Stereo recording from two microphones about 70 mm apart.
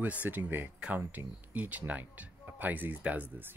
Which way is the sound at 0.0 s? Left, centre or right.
Right.